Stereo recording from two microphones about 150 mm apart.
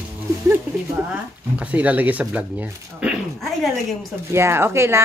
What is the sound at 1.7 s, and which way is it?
Speech, 10° right (ahead or behind).